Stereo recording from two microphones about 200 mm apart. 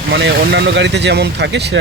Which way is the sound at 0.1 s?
60° right (ahead or behind).